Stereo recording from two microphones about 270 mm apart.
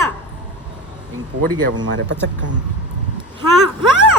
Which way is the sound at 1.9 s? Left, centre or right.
Right.